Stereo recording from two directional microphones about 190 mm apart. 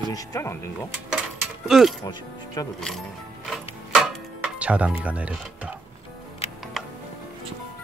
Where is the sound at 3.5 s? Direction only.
Centre (ahead or behind).